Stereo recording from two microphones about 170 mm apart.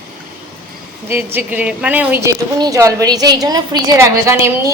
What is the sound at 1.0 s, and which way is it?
A woman's voice, 15° right (ahead or behind).